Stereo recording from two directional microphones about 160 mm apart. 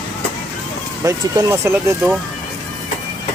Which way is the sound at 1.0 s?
20° right (ahead or behind).